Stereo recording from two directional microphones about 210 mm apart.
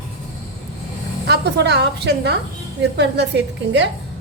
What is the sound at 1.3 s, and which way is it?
A woman's voice, 50° right (ahead or behind).